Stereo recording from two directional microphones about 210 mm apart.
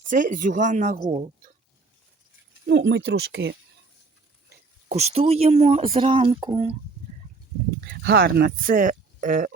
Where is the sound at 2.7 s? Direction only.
55° right (ahead or behind).